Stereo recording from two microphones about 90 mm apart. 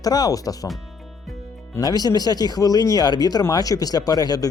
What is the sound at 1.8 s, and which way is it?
Speech, 45° left (ahead or behind).